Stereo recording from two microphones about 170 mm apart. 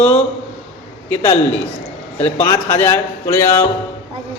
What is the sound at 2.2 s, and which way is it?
Speech, 40° left (ahead or behind).